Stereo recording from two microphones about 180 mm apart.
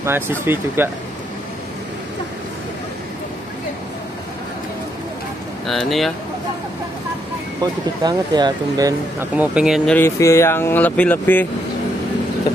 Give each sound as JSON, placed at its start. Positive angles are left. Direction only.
{"t": 0.0, "sound": "speech", "side_deg": -15}
{"t": 5.7, "sound": "speech", "side_deg": 0}
{"t": 7.6, "sound": "speech", "side_deg": -20}
{"t": 9.3, "sound": "speech", "side_deg": -5}
{"t": 9.8, "sound": "speech", "side_deg": 10}